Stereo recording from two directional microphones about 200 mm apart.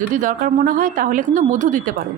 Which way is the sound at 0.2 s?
40° right (ahead or behind).